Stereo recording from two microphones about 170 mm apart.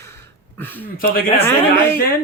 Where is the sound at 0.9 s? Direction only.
60° left (ahead or behind).